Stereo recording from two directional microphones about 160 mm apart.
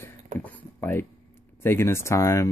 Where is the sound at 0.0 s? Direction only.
10° left (ahead or behind).